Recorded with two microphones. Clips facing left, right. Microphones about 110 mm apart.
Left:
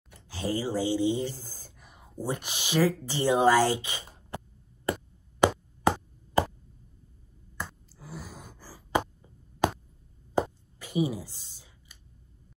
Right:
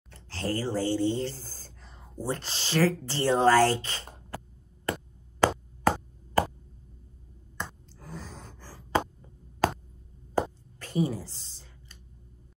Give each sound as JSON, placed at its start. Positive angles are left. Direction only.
{"t": 0.1, "sound": "a sound", "side_deg": 15}
{"t": 2.2, "sound": "speech", "side_deg": 15}
{"t": 4.3, "sound": "chop", "side_deg": 20}
{"t": 7.5, "sound": "sigh", "side_deg": 10}
{"t": 10.3, "sound": "plop", "side_deg": 10}